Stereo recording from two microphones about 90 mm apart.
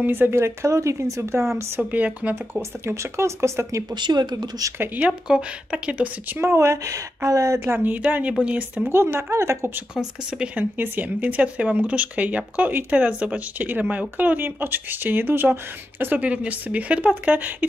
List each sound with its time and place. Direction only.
0.0 s speech: 20° right (ahead or behind)
1.8 s speech: 15° right (ahead or behind)
3.9 s speech: 50° right (ahead or behind)
4.7 s speech: 20° right (ahead or behind)
6.3 s speech: 30° right (ahead or behind)
7.6 s speech: 20° right (ahead or behind)
9.9 s speech: 10° right (ahead or behind)
10.6 s speech: 20° right (ahead or behind)